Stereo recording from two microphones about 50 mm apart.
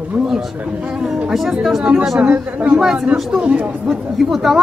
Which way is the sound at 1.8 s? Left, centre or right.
Centre.